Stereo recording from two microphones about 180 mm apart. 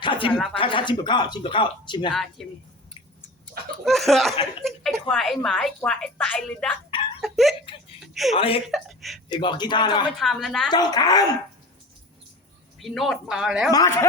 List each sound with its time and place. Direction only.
0.0 s a sound: 25° left (ahead or behind)
0.5 s speech: 30° left (ahead or behind)
2.4 s a woman's voice: centre (ahead or behind)
3.8 s a woman's voice: centre (ahead or behind)
7.6 s speech: 30° left (ahead or behind)
8.0 s speech: centre (ahead or behind)
8.4 s a woman's voice: 30° left (ahead or behind)
8.6 s a woman's voice: centre (ahead or behind)
9.3 s speech: 25° left (ahead or behind)
10.2 s a woman's voice: centre (ahead or behind)
10.7 s speech: 20° left (ahead or behind)
12.8 s a woman's voice: centre (ahead or behind)
13.7 s speech: 20° left (ahead or behind)